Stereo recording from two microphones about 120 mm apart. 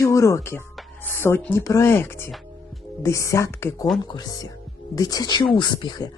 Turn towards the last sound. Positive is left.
turn(degrees=40)  # may be behind; listen again after turning